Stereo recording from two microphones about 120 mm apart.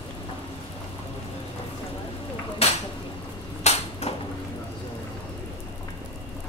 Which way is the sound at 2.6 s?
60° left (ahead or behind).